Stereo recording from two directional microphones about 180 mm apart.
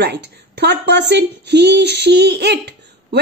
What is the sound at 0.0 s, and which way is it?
Speech, 70° right (ahead or behind).